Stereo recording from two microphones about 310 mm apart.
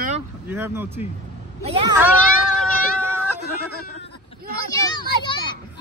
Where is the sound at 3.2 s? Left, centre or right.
Left.